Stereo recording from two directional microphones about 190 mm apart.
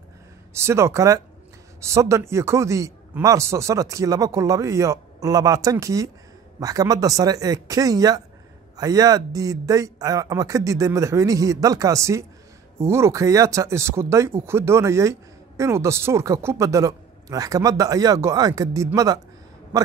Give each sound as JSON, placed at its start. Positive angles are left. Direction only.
{"t": 0.6, "sound": "speech", "side_deg": -15}